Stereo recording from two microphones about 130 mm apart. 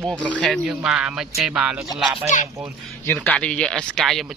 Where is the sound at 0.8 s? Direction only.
10° right (ahead or behind).